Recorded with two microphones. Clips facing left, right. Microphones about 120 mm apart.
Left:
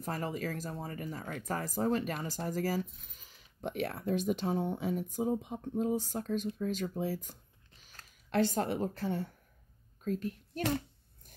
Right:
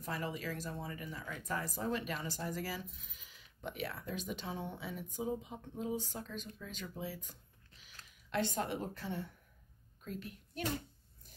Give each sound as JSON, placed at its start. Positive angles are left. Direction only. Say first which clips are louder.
{"t": 0.0, "sound": "speech", "louder": "left 4 dB", "side_deg": 40}